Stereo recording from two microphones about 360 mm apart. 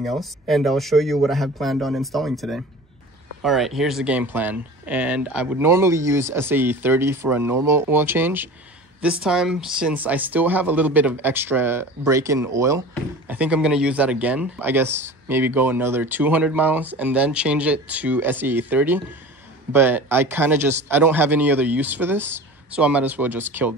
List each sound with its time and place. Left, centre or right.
0.0 s speech: centre